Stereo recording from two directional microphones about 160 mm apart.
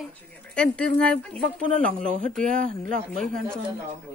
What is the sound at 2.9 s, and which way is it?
Speech, 5° left (ahead or behind).